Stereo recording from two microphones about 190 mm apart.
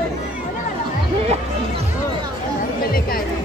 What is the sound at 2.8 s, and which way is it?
Chatter, 50° left (ahead or behind).